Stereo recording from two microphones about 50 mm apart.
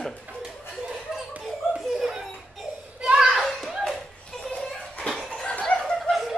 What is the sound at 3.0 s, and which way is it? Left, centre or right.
Children playing, centre.